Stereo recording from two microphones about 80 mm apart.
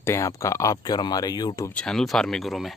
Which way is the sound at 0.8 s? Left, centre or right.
Left.